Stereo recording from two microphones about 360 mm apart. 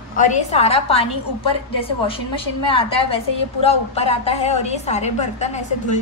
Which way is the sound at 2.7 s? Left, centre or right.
Centre.